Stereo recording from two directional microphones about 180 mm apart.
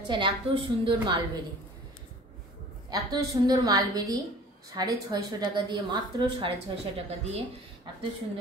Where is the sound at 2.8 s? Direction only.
20° right (ahead or behind).